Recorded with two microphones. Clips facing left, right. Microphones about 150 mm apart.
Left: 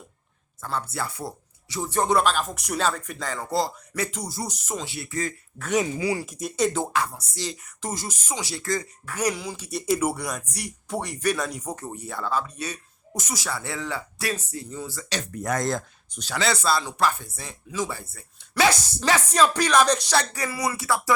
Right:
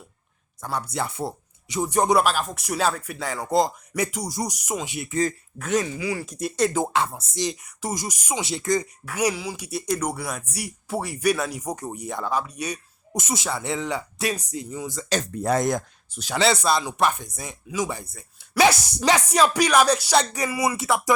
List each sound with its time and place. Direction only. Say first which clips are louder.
0.6 s speech: right 2 dB; 15° right (ahead or behind)
6.2 s speech: right 2 dB; centre (ahead or behind)
6.7 s speech: right 3 dB; 20° right (ahead or behind)
20.1 s speech: right 3 dB; 20° right (ahead or behind)